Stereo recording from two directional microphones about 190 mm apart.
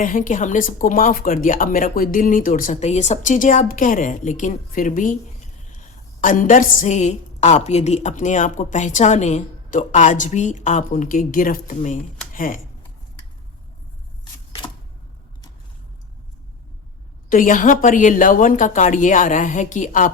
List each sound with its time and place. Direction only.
0.0 s speech: 45° left (ahead or behind)
6.2 s a woman's voice: 45° left (ahead or behind)
17.2 s speech: 45° left (ahead or behind)